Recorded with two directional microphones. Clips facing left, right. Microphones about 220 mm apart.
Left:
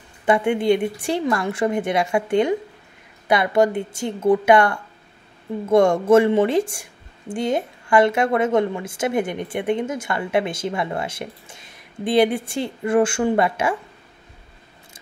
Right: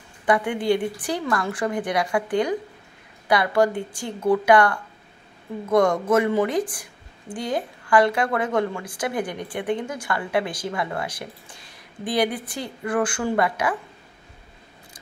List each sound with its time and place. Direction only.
0.2 s a woman's voice: 25° left (ahead or behind)